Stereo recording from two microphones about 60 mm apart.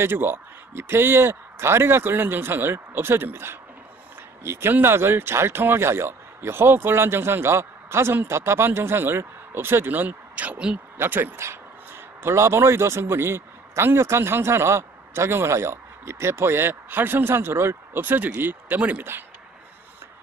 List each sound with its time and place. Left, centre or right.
0.0 s speech: right
11.0 s speech: right
11.3 s speech: right